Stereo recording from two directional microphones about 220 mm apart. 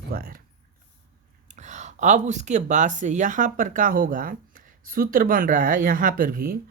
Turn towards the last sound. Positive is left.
turn(degrees=-40)  # may be behind; listen again after turning